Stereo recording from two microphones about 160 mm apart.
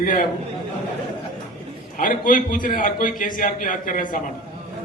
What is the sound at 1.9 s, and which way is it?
A man's voice, 55° left (ahead or behind).